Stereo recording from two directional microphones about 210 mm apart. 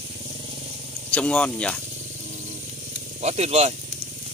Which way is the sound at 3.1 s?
30° right (ahead or behind).